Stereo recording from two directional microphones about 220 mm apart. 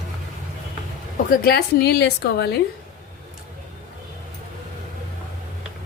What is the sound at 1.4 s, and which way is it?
A woman's voice, 45° left (ahead or behind).